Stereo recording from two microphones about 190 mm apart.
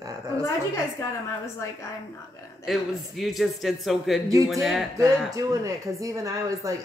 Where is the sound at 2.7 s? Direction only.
Centre (ahead or behind).